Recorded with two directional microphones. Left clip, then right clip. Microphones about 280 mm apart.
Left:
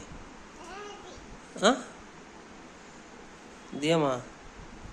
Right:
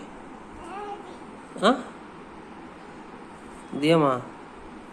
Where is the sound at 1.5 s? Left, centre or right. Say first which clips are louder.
Right 3 dB; left.